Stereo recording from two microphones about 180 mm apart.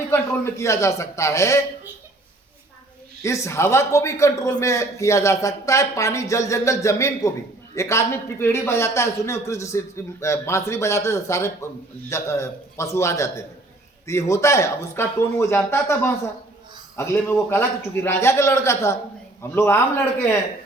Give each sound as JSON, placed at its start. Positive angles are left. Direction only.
{"t": 0.1, "sound": "a man's voice", "side_deg": 15}
{"t": 3.2, "sound": "a man's voice", "side_deg": 15}